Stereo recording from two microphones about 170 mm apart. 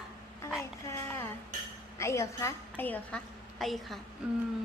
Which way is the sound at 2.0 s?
15° left (ahead or behind).